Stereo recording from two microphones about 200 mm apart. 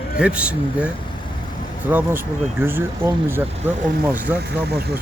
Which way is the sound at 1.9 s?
10° right (ahead or behind).